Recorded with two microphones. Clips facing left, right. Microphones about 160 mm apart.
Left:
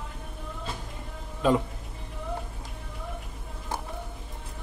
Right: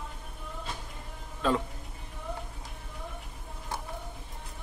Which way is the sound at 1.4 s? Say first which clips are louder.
Left 5 dB; 15° left (ahead or behind).